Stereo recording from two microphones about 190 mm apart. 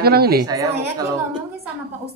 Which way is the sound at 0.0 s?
55° right (ahead or behind).